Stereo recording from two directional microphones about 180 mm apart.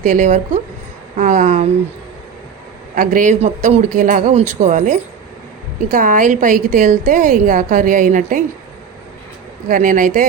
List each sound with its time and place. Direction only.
0.0 s a woman's voice: 45° right (ahead or behind)
2.9 s a woman's voice: 45° right (ahead or behind)
9.6 s a woman's voice: 45° right (ahead or behind)